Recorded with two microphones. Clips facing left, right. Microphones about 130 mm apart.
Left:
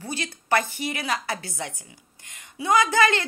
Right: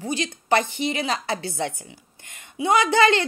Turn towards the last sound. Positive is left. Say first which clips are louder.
# right 2 dB
turn(degrees=-25)  # may be behind; listen again after turning